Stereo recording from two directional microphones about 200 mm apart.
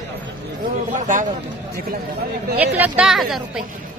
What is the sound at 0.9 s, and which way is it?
Speech, 40° right (ahead or behind).